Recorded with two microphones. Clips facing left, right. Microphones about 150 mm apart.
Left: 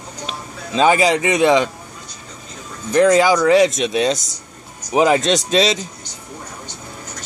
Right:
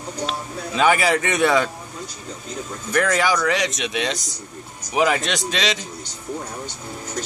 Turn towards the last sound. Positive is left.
turn(degrees=40)  # may be behind; listen again after turning